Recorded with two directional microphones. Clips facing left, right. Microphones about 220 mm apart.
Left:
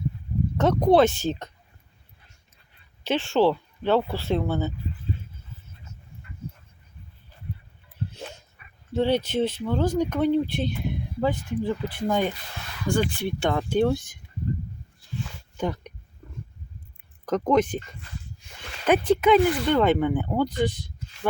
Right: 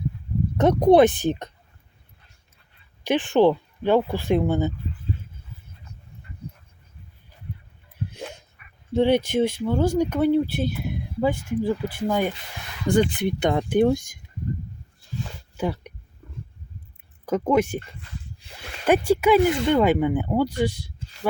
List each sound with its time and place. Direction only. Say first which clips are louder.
0.5 s speech: right 3 dB; 15° right (ahead or behind)
3.0 s speech: right 3 dB; 15° right (ahead or behind)
8.1 s dog: right 3 dB; 15° right (ahead or behind)
8.9 s speech: right 4 dB; 15° right (ahead or behind)
12.9 s speech: right 4 dB; 20° right (ahead or behind)
15.5 s a sound: right 1 dB; 10° right (ahead or behind)
17.2 s speech: right 1 dB; 10° right (ahead or behind)
18.9 s speech: right 1 dB; 10° right (ahead or behind)